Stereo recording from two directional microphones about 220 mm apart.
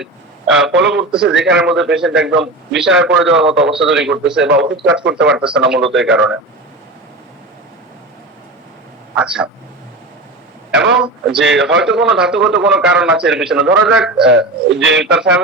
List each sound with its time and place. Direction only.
0.0 s a sound: centre (ahead or behind)
0.7 s speech: 55° right (ahead or behind)
1.1 s a man's voice: 5° right (ahead or behind)
4.4 s speech: 55° right (ahead or behind)
4.8 s a man's voice: 5° right (ahead or behind)
9.1 s a man's voice: 5° right (ahead or behind)
10.9 s a man's voice: 5° right (ahead or behind)
14.3 s speech: 55° right (ahead or behind)